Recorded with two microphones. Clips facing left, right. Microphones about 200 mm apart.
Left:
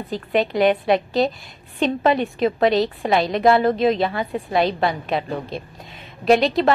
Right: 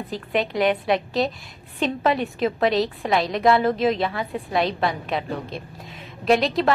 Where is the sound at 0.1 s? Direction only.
Centre (ahead or behind).